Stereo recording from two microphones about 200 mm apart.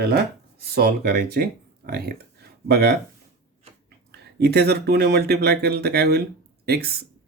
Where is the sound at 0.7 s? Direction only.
55° right (ahead or behind).